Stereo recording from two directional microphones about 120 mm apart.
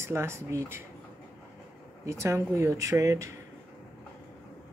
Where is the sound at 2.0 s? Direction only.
25° right (ahead or behind).